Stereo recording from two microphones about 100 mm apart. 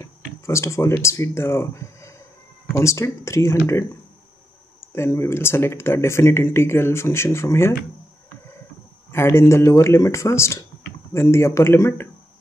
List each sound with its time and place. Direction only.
0.0 s speech: 30° left (ahead or behind)
4.9 s speech: 25° left (ahead or behind)
9.1 s speech: 25° left (ahead or behind)